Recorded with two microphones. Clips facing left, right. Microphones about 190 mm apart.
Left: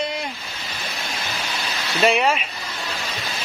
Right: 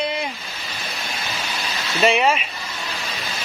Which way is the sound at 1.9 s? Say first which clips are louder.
Right 1 dB; centre (ahead or behind).